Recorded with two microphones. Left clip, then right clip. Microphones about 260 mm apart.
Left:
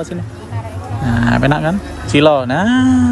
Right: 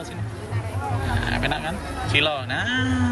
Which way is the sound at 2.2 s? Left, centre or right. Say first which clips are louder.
Left 12 dB; left.